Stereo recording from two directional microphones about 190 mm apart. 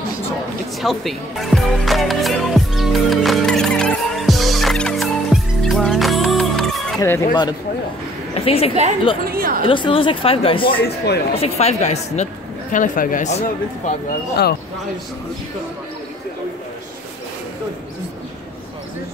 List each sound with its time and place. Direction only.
0.8 s music: centre (ahead or behind)
7.0 s speech: 15° left (ahead or behind)
8.4 s a woman's voice: 30° left (ahead or behind)
9.2 s speech: 50° right (ahead or behind)
9.6 s speech: 25° left (ahead or behind)
10.7 s speech: 55° left (ahead or behind)
11.3 s speech: 30° left (ahead or behind)